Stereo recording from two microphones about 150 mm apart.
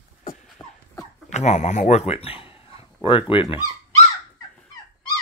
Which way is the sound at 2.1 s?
40° left (ahead or behind).